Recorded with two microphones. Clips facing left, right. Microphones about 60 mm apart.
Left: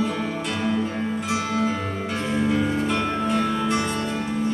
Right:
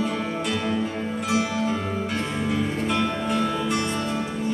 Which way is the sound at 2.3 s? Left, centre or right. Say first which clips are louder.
Left 6 dB; centre.